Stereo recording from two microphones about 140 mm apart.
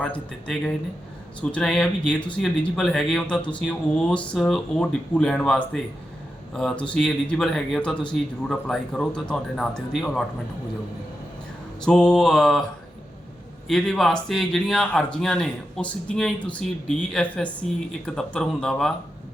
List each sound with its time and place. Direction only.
0.0 s speech: 5° left (ahead or behind)
11.9 s speech: 5° left (ahead or behind)
13.7 s speech: centre (ahead or behind)